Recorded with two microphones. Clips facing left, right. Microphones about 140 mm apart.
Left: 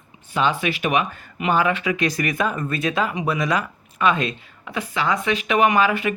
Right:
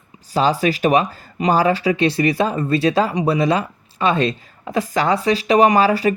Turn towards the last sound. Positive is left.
turn(degrees=-35)  # may be behind; listen again after turning